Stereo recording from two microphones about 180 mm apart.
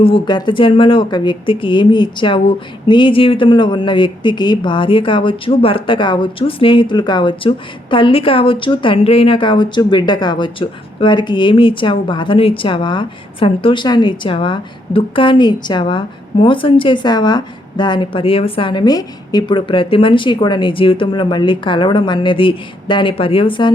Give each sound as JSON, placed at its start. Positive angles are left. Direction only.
{"t": 0.0, "sound": "speech", "side_deg": 25}